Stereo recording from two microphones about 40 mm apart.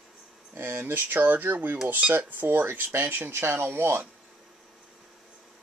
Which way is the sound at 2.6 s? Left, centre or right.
Right.